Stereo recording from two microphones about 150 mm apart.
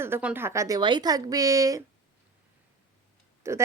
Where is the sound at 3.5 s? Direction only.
20° right (ahead or behind).